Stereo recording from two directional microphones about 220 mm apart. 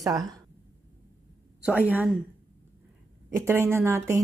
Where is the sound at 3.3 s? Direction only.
10° right (ahead or behind).